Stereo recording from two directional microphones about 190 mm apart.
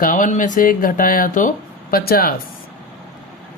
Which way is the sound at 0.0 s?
45° left (ahead or behind).